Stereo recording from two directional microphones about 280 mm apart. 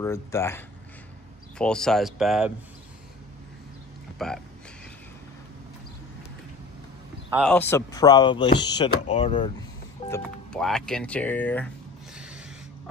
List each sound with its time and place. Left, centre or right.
0.0 s speech: centre
4.2 s speech: centre
7.3 s speech: centre
10.0 s speech: centre
12.2 s a sound: centre